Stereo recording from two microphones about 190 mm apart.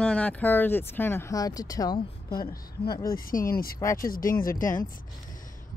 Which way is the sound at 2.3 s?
50° left (ahead or behind).